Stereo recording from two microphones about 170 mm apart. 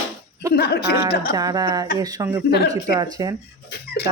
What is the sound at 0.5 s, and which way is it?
Speech, 75° left (ahead or behind).